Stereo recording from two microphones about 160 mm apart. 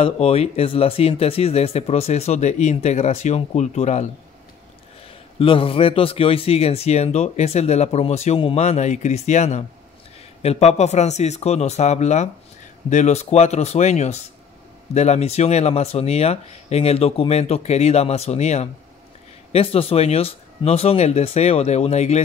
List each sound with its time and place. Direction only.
0.0 s a man's voice: 40° left (ahead or behind)
5.4 s a man's voice: 35° left (ahead or behind)